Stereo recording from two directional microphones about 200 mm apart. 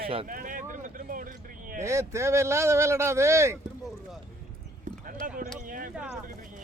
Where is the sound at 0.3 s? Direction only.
45° right (ahead or behind).